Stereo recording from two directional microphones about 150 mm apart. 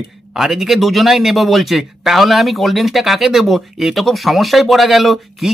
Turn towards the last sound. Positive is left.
turn(degrees=0)  # may be behind; listen again after turning